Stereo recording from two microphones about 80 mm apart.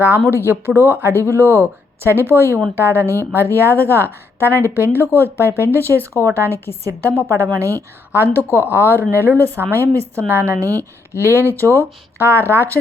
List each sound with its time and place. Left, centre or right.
0.3 s a woman's voice: right
8.1 s a woman's voice: right
11.2 s a woman's voice: right